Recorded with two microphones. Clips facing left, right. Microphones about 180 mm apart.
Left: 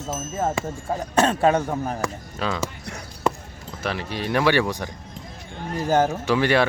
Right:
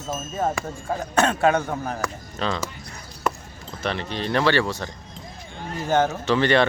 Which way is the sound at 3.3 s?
25° left (ahead or behind).